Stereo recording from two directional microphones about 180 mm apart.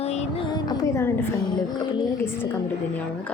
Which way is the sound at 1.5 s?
25° left (ahead or behind).